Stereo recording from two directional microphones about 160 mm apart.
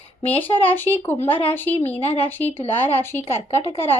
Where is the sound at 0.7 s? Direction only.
15° left (ahead or behind).